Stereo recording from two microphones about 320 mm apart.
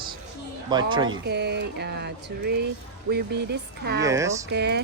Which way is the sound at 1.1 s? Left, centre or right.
Right.